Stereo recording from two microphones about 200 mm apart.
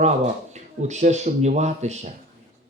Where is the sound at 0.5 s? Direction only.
35° right (ahead or behind).